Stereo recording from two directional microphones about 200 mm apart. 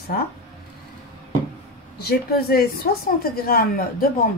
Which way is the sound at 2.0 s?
50° left (ahead or behind).